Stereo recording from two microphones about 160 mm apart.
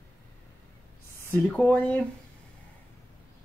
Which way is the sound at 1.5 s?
10° left (ahead or behind).